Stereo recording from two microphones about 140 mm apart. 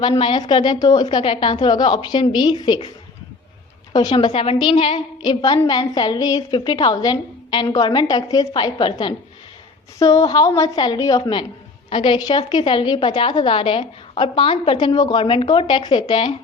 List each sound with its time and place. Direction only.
0.2 s a woman's voice: 35° left (ahead or behind)
3.9 s a woman's voice: 35° left (ahead or behind)